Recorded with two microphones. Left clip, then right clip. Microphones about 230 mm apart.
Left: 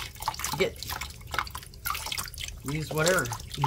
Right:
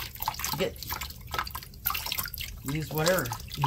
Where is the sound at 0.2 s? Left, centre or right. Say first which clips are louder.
Left 2 dB; centre.